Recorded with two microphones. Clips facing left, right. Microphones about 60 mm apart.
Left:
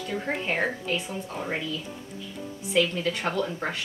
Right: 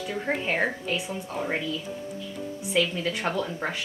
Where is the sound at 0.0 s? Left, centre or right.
Centre.